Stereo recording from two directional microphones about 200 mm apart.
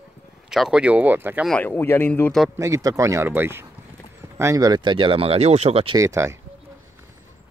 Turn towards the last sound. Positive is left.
turn(degrees=-15)  # may be behind; listen again after turning